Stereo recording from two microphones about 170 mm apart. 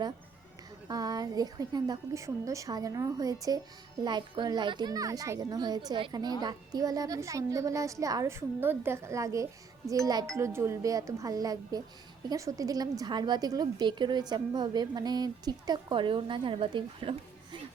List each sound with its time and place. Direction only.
0.9 s a woman's voice: 20° right (ahead or behind)